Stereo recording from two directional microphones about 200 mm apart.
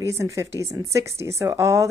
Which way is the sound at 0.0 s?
15° right (ahead or behind).